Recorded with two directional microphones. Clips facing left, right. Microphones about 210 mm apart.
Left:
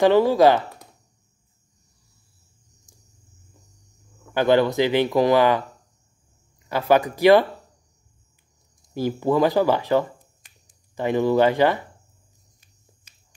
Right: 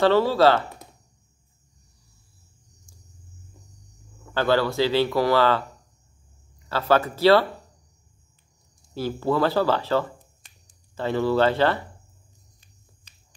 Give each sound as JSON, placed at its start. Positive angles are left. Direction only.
{"t": 0.0, "sound": "speech", "side_deg": 15}
{"t": 4.3, "sound": "speech", "side_deg": 15}
{"t": 6.7, "sound": "speech", "side_deg": 15}
{"t": 8.9, "sound": "speech", "side_deg": 15}